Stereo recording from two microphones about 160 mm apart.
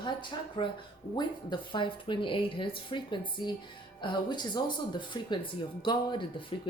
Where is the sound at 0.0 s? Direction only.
30° left (ahead or behind).